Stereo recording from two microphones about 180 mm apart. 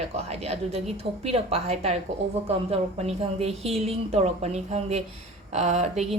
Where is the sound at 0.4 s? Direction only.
35° right (ahead or behind).